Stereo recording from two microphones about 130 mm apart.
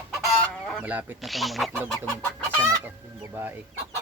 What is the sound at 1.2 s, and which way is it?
Speech, centre (ahead or behind).